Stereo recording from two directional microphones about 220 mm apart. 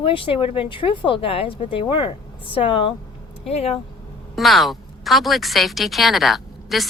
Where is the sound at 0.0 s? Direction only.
25° left (ahead or behind).